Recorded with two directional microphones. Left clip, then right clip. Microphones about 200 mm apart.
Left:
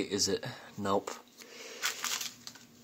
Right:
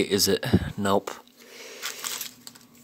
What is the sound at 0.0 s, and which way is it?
Speech, 35° right (ahead or behind).